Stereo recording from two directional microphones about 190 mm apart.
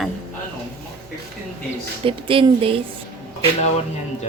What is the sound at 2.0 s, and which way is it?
Speech, 30° right (ahead or behind).